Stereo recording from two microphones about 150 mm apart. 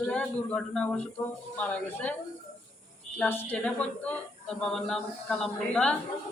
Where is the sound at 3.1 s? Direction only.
10° left (ahead or behind).